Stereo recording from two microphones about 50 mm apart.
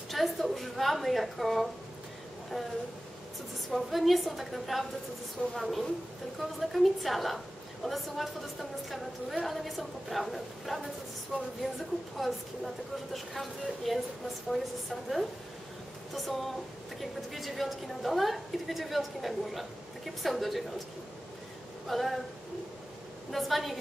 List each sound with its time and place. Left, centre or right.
0.1 s a woman's voice: centre
3.7 s a woman's voice: centre
11.6 s a woman's voice: right
12.2 s a woman's voice: centre
21.8 s a woman's voice: centre
23.3 s a woman's voice: centre